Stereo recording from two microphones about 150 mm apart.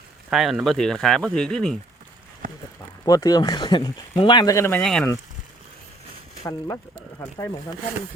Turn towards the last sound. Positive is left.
turn(degrees=20)  # may be behind; listen again after turning